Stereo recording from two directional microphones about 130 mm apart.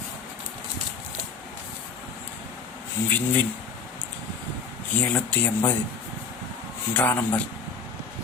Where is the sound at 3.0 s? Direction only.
15° left (ahead or behind).